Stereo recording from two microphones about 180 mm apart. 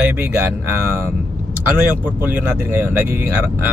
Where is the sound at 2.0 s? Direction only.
10° right (ahead or behind).